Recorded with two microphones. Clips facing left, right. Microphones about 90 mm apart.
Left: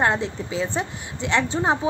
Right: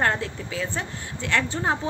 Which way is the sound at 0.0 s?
20° left (ahead or behind).